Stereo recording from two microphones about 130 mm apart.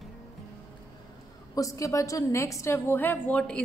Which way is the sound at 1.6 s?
25° left (ahead or behind).